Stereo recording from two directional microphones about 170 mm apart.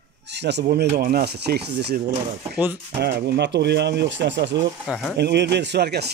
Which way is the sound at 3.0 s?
75° right (ahead or behind).